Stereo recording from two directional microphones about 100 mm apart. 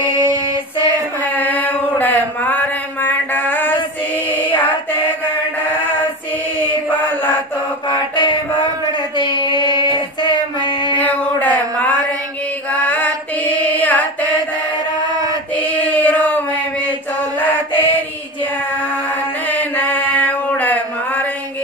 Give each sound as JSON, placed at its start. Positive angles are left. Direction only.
{"t": 1.3, "sound": "chant", "side_deg": 15}
{"t": 2.0, "sound": "mantra", "side_deg": 15}
{"t": 6.6, "sound": "mantra", "side_deg": 15}
{"t": 9.2, "sound": "child singing", "side_deg": 50}
{"t": 11.0, "sound": "a sound", "side_deg": 15}
{"t": 12.7, "sound": "music", "side_deg": 15}
{"t": 13.7, "sound": "carnatic music", "side_deg": 15}
{"t": 16.1, "sound": "a sound", "side_deg": 15}
{"t": 17.4, "sound": "mantra", "side_deg": 15}
{"t": 19.9, "sound": "mantra", "side_deg": 15}